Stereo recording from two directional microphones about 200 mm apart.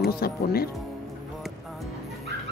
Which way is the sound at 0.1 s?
50° left (ahead or behind).